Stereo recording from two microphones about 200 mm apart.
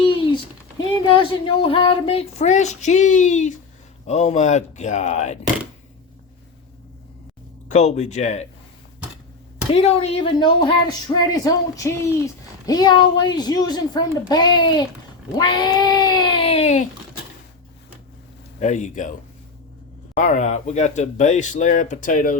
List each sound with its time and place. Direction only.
0.8 s speech: 25° left (ahead or behind)
7.7 s speech: 35° left (ahead or behind)
9.7 s a woman's voice: 30° left (ahead or behind)
18.6 s speech: 35° left (ahead or behind)
20.1 s speech: 40° left (ahead or behind)